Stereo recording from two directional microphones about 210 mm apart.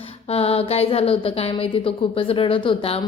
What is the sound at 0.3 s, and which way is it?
Speech, 30° left (ahead or behind).